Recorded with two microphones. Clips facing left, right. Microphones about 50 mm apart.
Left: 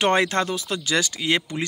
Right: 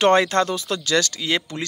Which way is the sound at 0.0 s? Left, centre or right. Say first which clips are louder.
Right 3 dB; centre.